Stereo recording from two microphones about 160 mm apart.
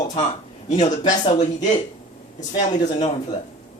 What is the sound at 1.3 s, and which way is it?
Speech, 45° left (ahead or behind).